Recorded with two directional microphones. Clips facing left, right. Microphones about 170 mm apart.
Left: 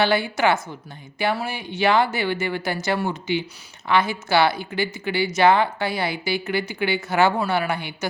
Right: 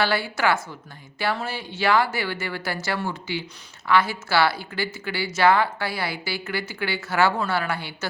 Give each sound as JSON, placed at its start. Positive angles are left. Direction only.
{"t": 0.0, "sound": "speech", "side_deg": 20}